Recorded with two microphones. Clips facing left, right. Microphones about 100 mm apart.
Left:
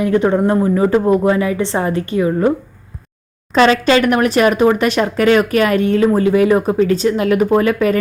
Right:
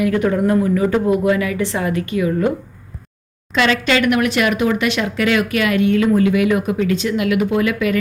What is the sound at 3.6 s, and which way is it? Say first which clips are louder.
Speech: left 5 dB; 35° left (ahead or behind).